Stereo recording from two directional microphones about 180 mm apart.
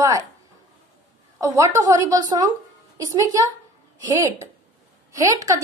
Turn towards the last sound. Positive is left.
turn(degrees=-20)  # may be behind; listen again after turning